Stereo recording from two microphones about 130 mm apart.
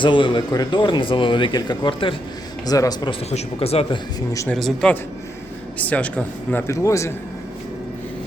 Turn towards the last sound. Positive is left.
turn(degrees=25)  # may be behind; listen again after turning